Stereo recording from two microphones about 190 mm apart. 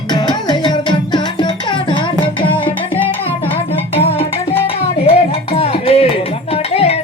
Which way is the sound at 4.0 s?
30° left (ahead or behind).